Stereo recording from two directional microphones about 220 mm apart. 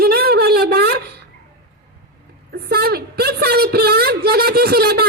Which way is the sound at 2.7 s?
45° right (ahead or behind).